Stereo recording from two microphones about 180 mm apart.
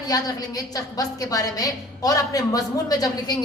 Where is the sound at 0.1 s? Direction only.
20° left (ahead or behind).